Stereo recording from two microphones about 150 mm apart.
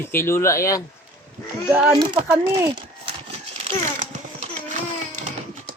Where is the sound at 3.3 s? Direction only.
45° right (ahead or behind).